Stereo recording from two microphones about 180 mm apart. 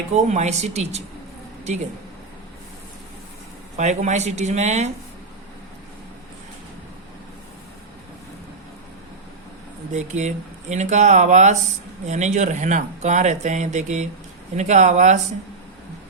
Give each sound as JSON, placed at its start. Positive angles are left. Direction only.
{"t": 0.1, "sound": "speech", "side_deg": -40}
{"t": 3.8, "sound": "speech", "side_deg": -40}
{"t": 9.9, "sound": "speech", "side_deg": -40}